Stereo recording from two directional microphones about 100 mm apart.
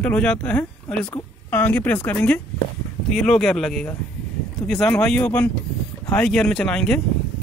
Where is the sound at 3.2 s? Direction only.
5° left (ahead or behind).